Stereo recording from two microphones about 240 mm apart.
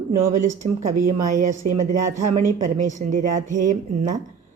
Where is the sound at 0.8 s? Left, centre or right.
Right.